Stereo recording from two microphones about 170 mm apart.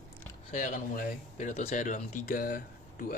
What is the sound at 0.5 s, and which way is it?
Speech, 50° left (ahead or behind).